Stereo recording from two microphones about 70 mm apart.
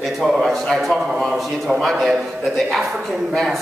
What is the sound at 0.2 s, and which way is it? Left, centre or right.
A man's voice, centre.